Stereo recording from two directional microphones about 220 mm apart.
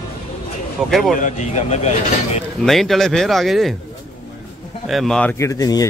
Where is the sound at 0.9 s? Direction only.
Centre (ahead or behind).